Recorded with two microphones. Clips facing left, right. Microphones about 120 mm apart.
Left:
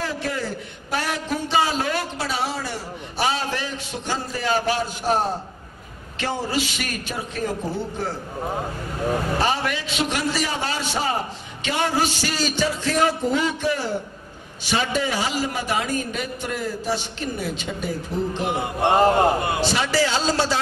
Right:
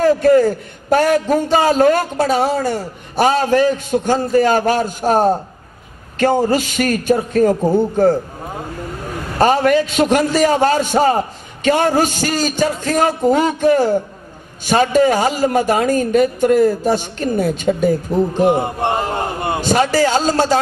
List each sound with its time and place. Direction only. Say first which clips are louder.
0.0 s a man's voice: right 16 dB; 45° right (ahead or behind)
9.4 s a man's voice: right 11 dB; 45° right (ahead or behind)